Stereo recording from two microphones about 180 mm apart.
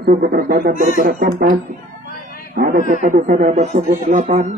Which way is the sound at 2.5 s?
55° right (ahead or behind).